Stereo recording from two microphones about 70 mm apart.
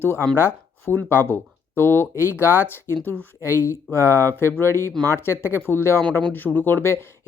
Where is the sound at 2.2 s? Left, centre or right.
Right.